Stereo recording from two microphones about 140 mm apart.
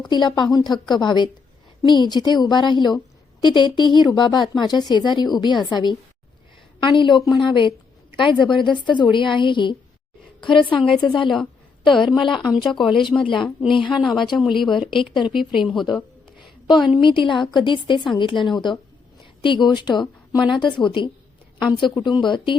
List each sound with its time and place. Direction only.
0.1 s a woman's voice: 30° left (ahead or behind)
12.6 s a woman's voice: centre (ahead or behind)
12.9 s speech: 35° left (ahead or behind)
14.3 s a woman's voice: centre (ahead or behind)
14.8 s speech: 35° left (ahead or behind)
15.0 s a woman's voice: 5° right (ahead or behind)
16.6 s a woman's voice: 35° left (ahead or behind)